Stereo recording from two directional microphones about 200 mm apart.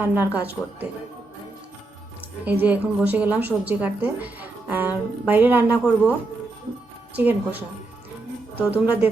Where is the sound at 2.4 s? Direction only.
10° right (ahead or behind).